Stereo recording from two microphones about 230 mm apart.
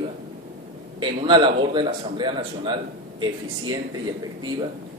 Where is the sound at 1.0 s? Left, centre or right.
Centre.